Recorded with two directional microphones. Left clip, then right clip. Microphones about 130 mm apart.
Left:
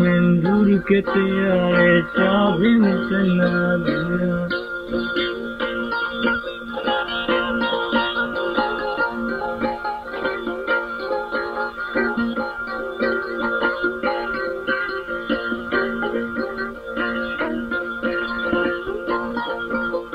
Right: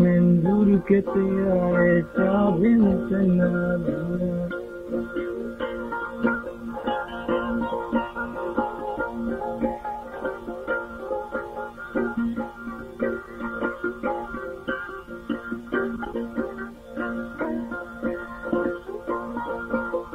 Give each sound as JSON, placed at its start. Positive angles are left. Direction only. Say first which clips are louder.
{"t": 0.0, "sound": "music", "louder": "left 3 dB", "side_deg": 30}
{"t": 10.2, "sound": "music", "louder": "left 7 dB", "side_deg": 30}
{"t": 11.9, "sound": "organ", "louder": "left 4 dB", "side_deg": 35}
{"t": 13.0, "sound": "music", "louder": "left 6 dB", "side_deg": 30}
{"t": 15.2, "sound": "music", "louder": "left 6 dB", "side_deg": 30}